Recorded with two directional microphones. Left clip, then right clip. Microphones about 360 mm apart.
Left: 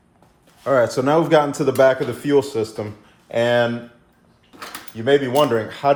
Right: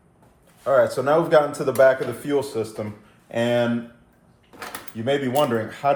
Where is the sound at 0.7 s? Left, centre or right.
Left.